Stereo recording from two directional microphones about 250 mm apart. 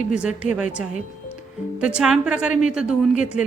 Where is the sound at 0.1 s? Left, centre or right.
Centre.